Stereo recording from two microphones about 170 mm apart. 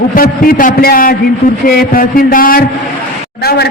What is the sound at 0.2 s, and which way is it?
A man's voice, 55° left (ahead or behind).